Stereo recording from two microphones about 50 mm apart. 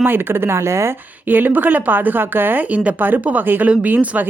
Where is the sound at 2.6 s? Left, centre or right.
Right.